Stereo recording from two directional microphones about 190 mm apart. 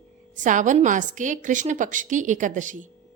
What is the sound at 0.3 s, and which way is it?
A woman's voice, 40° right (ahead or behind).